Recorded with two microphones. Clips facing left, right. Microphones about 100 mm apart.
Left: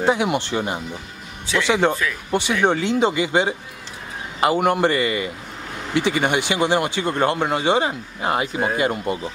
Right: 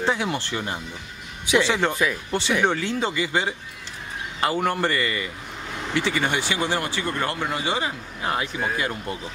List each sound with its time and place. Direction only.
0.1 s speech: 15° left (ahead or behind)
1.4 s speech: 15° right (ahead or behind)
1.7 s speech: 15° left (ahead or behind)